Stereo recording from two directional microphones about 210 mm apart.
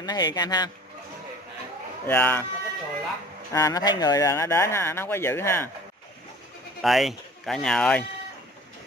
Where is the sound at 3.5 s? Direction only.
15° left (ahead or behind).